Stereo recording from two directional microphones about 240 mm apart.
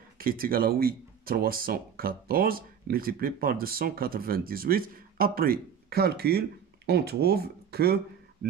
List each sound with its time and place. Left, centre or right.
0.2 s speech: right